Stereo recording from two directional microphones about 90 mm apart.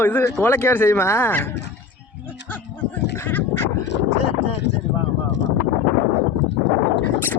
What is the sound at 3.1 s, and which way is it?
Duck, 25° left (ahead or behind).